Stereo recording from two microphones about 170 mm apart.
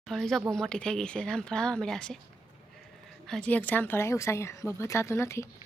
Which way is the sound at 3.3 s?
10° left (ahead or behind).